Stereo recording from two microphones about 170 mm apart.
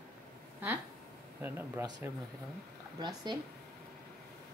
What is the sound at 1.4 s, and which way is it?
Speech, 10° right (ahead or behind).